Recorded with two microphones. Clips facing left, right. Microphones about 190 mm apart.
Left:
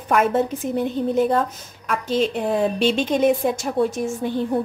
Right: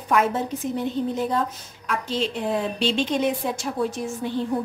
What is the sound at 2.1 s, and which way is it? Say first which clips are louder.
A woman's voice: left 5 dB; 50° left (ahead or behind).